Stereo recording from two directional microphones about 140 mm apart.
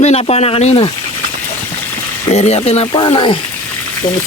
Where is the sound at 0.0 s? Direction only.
50° left (ahead or behind).